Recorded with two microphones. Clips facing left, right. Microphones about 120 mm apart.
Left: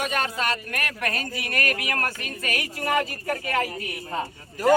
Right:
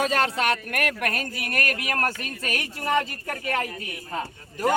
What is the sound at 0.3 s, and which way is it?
Speech, 60° right (ahead or behind).